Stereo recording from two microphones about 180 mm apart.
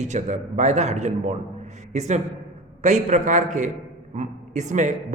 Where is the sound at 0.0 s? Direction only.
40° right (ahead or behind).